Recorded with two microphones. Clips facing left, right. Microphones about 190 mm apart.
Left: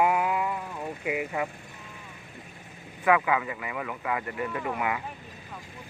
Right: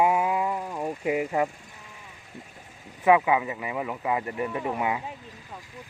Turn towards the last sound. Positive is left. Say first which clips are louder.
# right 2 dB
turn(degrees=-25)  # may be behind; listen again after turning